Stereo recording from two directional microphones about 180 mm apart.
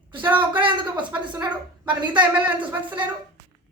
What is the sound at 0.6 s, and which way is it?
A woman's voice, 25° right (ahead or behind).